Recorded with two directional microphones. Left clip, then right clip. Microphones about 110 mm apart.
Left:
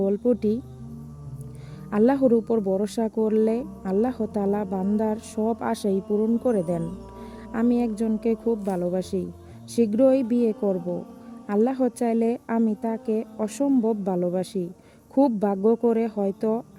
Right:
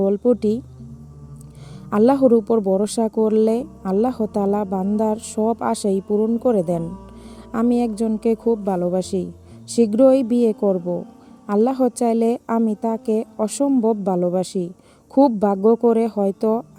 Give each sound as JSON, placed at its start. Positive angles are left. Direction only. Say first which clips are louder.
{"t": 0.0, "sound": "a woman's voice", "louder": "right 5 dB", "side_deg": -15}
{"t": 1.9, "sound": "a woman's voice", "louder": "right 5 dB", "side_deg": -15}